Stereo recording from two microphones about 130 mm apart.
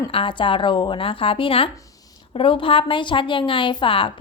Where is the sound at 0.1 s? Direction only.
40° left (ahead or behind).